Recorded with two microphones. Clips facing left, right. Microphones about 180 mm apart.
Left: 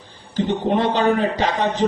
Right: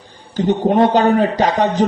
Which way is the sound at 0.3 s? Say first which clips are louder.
Right 5 dB; 45° right (ahead or behind).